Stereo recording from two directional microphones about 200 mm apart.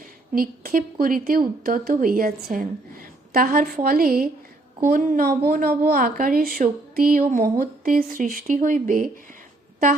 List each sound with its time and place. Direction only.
0.3 s a woman's voice: 45° right (ahead or behind)